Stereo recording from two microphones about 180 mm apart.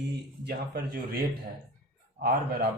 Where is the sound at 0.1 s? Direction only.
60° right (ahead or behind).